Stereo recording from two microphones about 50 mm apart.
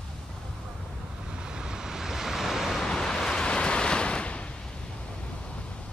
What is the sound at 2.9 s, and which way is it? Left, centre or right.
Waves, centre.